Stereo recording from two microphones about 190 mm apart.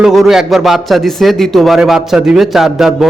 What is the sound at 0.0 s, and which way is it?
A man's voice, centre (ahead or behind).